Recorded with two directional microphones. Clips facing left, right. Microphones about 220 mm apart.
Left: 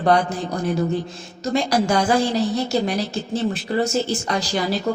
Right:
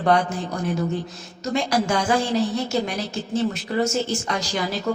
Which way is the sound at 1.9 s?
35° left (ahead or behind).